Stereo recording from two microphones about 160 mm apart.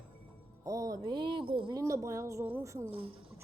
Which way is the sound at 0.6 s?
25° right (ahead or behind).